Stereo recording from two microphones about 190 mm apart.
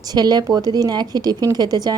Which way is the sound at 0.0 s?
20° right (ahead or behind).